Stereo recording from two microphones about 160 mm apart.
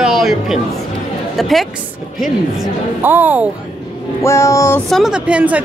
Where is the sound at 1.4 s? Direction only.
Centre (ahead or behind).